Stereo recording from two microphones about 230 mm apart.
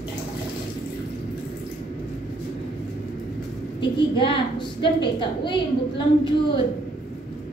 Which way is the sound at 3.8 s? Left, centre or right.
Left.